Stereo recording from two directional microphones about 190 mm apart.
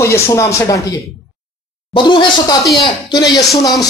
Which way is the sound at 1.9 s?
25° left (ahead or behind).